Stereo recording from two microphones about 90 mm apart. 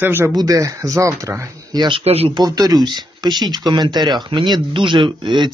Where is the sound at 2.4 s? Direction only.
45° right (ahead or behind).